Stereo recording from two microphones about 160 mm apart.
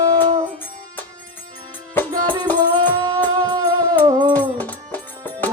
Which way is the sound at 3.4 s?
25° right (ahead or behind).